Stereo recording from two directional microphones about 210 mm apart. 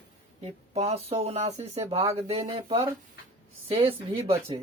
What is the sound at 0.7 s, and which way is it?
Speech, 30° right (ahead or behind).